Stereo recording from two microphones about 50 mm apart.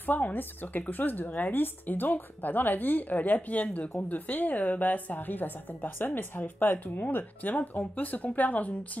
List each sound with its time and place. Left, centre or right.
0.0 s speech: left